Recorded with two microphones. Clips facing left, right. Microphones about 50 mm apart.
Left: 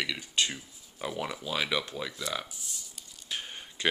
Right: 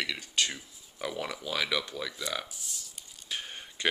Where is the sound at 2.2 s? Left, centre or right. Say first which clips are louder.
Even; centre.